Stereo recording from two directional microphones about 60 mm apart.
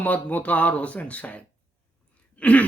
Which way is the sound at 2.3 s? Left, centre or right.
Left.